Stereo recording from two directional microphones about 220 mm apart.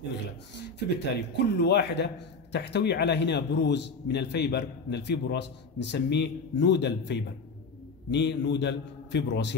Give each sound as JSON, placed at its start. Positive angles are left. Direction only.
{"t": 0.8, "sound": "a man's voice", "side_deg": 50}